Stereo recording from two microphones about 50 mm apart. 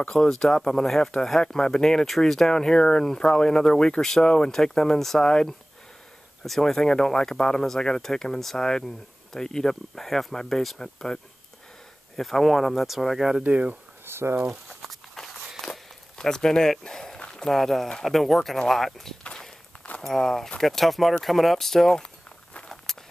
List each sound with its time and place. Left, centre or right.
0.1 s speech: centre
12.2 s speech: centre
13.4 s speech: right
14.0 s speech: right
14.7 s walk: centre
20.0 s speech: centre
22.5 s walk: centre